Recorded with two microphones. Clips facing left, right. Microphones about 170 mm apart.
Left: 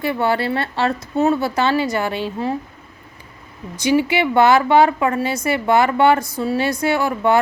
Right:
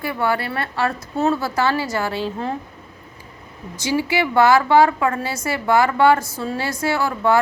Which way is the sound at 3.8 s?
20° left (ahead or behind).